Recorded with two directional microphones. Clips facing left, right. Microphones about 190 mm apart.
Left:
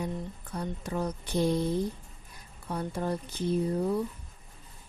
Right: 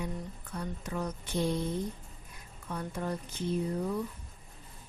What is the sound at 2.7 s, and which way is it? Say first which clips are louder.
Speech: left 4 dB; 30° left (ahead or behind).